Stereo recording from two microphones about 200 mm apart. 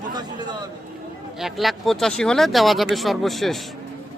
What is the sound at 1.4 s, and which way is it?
Speech, centre (ahead or behind).